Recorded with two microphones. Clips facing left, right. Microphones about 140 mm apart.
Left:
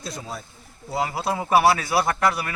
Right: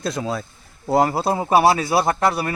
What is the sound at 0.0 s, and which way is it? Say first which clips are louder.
Speech: right 9 dB; 90° right.